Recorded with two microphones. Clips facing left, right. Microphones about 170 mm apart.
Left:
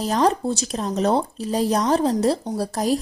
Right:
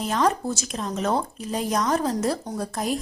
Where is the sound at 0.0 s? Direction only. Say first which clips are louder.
Left 3 dB; 35° left (ahead or behind).